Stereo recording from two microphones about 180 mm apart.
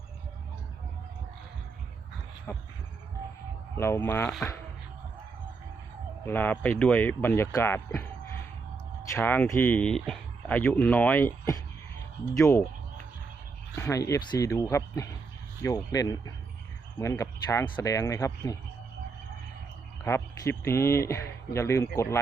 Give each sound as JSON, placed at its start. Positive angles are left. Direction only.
{"t": 2.5, "sound": "speech", "side_deg": 15}
{"t": 3.8, "sound": "speech", "side_deg": 15}
{"t": 6.2, "sound": "speech", "side_deg": 10}
{"t": 9.1, "sound": "speech", "side_deg": 10}
{"t": 13.7, "sound": "speech", "side_deg": 15}
{"t": 20.1, "sound": "speech", "side_deg": 15}